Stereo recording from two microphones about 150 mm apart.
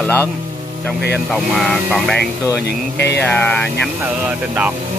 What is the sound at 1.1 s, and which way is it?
Speech, centre (ahead or behind).